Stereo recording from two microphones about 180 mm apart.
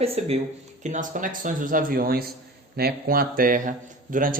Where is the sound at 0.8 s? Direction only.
45° right (ahead or behind).